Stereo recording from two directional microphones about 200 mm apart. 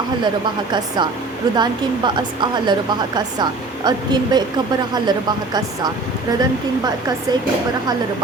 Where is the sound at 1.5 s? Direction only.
20° right (ahead or behind).